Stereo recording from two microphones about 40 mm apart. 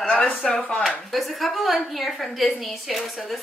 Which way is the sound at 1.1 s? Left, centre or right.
Centre.